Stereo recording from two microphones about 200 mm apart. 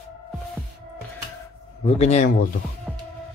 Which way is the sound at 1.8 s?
35° left (ahead or behind).